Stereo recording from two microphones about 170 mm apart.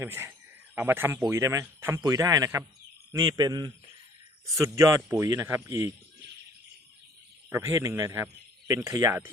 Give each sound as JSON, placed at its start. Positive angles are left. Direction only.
{"t": 0.0, "sound": "speech", "side_deg": -15}
{"t": 7.5, "sound": "speech", "side_deg": -15}